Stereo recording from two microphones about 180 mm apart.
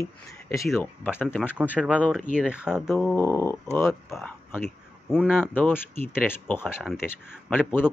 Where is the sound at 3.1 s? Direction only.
15° left (ahead or behind); by 5.5 s 5° right (ahead or behind).